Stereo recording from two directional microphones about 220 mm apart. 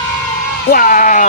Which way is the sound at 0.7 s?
40° left (ahead or behind).